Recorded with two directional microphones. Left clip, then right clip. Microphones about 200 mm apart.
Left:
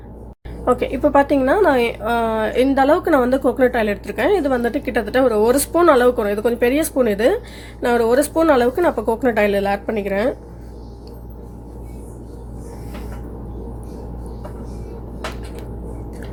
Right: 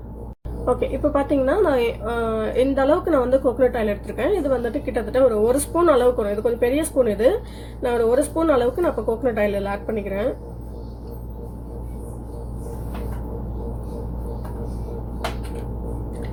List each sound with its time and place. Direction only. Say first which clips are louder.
0.6 s a woman's voice: left 4 dB; 40° left (ahead or behind)